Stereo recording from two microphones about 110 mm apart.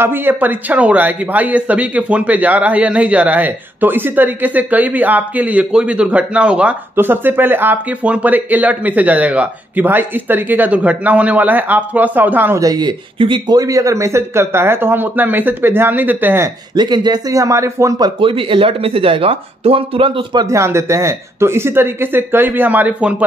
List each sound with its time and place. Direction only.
0.0 s speech: 20° right (ahead or behind)
12.5 s speech: 35° right (ahead or behind); by 16.4 s 15° right (ahead or behind)
16.7 s speech: 40° right (ahead or behind)
18.2 s speech: 55° right (ahead or behind)
20.4 s speech: 25° right (ahead or behind)